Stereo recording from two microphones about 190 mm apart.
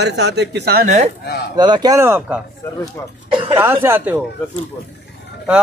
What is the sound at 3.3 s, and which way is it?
Throat clearing, 25° right (ahead or behind).